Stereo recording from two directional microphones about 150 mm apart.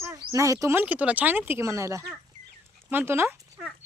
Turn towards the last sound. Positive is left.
turn(degrees=-15)  # may be behind; listen again after turning